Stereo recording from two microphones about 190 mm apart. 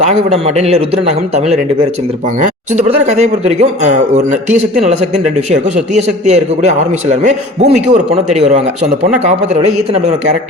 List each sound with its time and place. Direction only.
0.0 s a man's voice: 35° right (ahead or behind)
5.5 s a man's voice: 40° right (ahead or behind)